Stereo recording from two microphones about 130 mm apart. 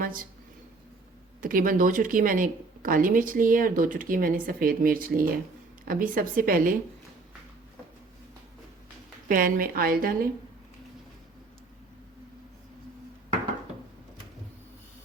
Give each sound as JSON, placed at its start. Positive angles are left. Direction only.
{"t": 0.0, "sound": "a sound", "side_deg": -90}
{"t": 1.4, "sound": "speech", "side_deg": -90}
{"t": 9.3, "sound": "speech", "side_deg": -90}